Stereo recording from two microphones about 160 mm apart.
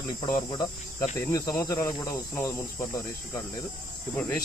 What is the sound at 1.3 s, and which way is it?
Speech, 20° left (ahead or behind).